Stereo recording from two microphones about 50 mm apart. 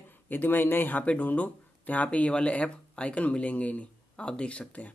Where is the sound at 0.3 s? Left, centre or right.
Left.